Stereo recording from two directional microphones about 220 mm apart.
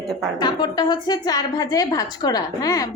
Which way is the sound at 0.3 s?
20° left (ahead or behind).